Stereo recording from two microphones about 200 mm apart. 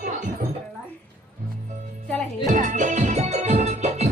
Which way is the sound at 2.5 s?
40° right (ahead or behind).